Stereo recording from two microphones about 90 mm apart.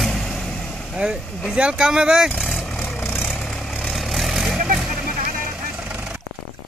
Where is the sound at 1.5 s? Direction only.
10° right (ahead or behind).